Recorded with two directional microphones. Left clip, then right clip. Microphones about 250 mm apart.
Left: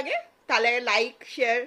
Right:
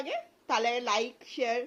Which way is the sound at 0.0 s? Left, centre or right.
Centre.